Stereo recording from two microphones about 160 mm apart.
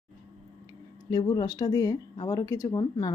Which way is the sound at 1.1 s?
25° left (ahead or behind).